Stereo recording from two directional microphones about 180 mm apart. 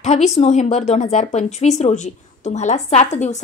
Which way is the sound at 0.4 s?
40° left (ahead or behind).